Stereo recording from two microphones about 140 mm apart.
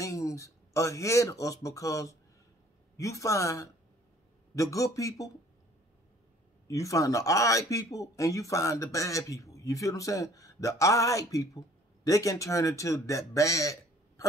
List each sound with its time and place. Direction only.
0.0 s speech: 20° left (ahead or behind)
6.7 s speech: 25° left (ahead or behind)